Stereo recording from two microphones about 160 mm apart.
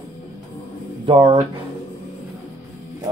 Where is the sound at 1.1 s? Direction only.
30° right (ahead or behind).